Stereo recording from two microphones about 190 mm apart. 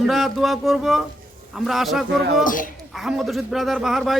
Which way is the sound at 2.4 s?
45° left (ahead or behind).